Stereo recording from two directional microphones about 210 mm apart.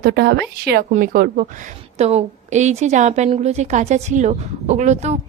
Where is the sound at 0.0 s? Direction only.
50° right (ahead or behind).